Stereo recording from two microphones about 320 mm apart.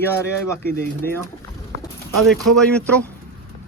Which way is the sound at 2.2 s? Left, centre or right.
Centre.